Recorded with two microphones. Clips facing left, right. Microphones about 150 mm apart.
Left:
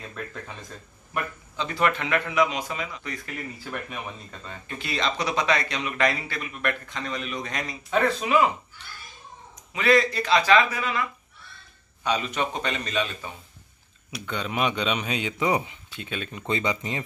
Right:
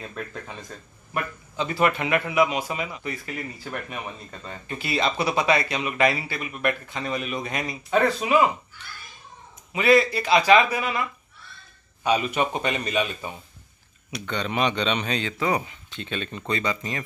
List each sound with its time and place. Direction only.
0.1 s speech: 5° right (ahead or behind)
9.7 s speech: 10° right (ahead or behind)
14.1 s speech: 5° left (ahead or behind)
15.9 s speech: 5° left (ahead or behind)
16.4 s speech: 20° left (ahead or behind)